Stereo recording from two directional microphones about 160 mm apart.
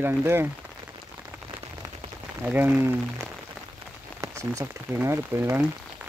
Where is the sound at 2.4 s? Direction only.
10° right (ahead or behind).